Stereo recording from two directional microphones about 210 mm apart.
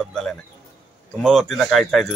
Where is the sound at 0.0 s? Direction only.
Centre (ahead or behind).